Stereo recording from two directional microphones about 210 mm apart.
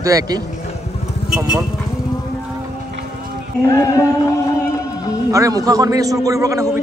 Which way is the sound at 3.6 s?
15° left (ahead or behind).